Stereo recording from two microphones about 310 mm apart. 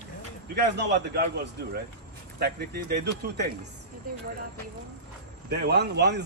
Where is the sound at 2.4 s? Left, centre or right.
Right.